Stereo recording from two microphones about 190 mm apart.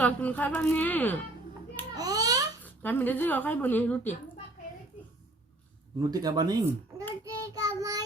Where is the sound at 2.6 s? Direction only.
10° left (ahead or behind).